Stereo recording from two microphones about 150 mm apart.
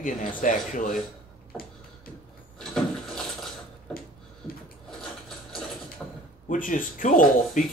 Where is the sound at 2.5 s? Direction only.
5° left (ahead or behind).